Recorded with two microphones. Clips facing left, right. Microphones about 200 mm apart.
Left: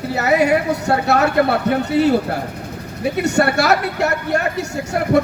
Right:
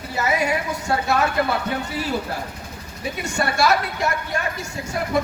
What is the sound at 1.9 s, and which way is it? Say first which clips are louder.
Speech: left 10 dB; 65° left (ahead or behind).